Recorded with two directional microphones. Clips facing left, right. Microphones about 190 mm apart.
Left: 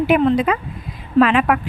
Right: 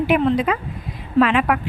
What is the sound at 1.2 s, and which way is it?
Speech, 40° left (ahead or behind).